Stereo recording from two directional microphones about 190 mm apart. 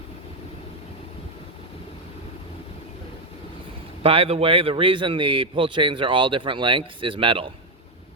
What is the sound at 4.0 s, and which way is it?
A man's voice, 30° right (ahead or behind).